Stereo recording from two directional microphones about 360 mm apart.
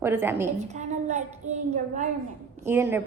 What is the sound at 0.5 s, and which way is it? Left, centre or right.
A woman's voice, centre.